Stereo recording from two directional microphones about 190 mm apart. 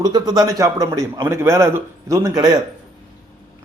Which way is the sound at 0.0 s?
20° right (ahead or behind).